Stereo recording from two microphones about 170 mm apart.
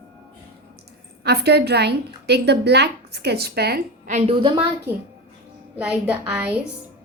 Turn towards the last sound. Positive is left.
turn(degrees=-10)  # may be behind; listen again after turning